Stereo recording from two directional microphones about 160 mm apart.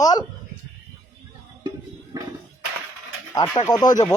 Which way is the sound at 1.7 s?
25° right (ahead or behind).